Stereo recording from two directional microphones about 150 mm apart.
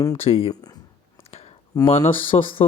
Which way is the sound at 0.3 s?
40° left (ahead or behind).